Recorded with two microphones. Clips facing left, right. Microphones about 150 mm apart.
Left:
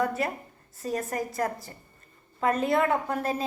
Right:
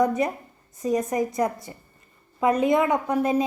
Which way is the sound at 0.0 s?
15° right (ahead or behind).